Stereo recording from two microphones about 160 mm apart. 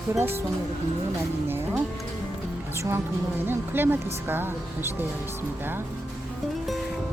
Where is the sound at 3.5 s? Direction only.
15° right (ahead or behind).